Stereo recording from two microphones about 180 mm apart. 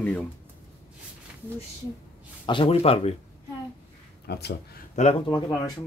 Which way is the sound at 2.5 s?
30° left (ahead or behind).